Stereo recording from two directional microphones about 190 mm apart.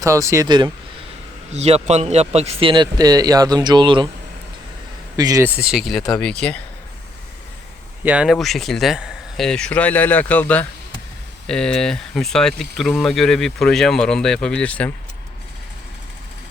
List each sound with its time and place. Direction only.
0.0 s speech: 15° right (ahead or behind)
1.5 s a man's voice: 35° right (ahead or behind)
5.1 s speech: 20° right (ahead or behind); by 6.6 s 5° left (ahead or behind)
8.0 s speech: 5° right (ahead or behind)